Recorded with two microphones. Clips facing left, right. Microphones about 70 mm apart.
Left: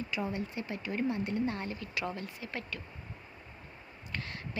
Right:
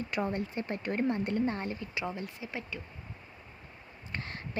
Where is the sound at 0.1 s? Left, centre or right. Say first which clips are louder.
Right 5 dB; right.